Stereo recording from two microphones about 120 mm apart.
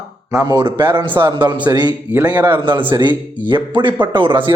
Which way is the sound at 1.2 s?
40° right (ahead or behind).